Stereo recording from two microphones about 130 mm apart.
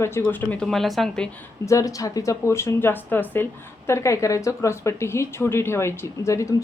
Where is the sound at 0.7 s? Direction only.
Centre (ahead or behind).